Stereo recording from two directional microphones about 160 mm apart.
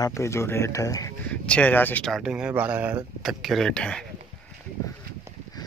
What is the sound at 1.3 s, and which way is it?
Speech, 5° left (ahead or behind).